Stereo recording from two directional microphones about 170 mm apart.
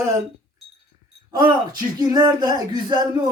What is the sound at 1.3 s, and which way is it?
Speech, 25° right (ahead or behind).